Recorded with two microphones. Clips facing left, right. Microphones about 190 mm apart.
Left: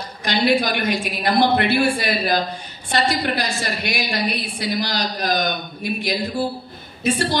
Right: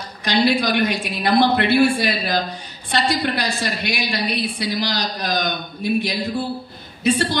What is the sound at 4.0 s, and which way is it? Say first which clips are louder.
A woman's voice: right 1 dB; 55° left (ahead or behind).